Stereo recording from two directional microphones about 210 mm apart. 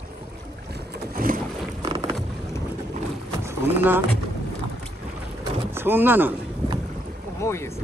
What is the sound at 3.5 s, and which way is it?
Rowboat, 10° right (ahead or behind).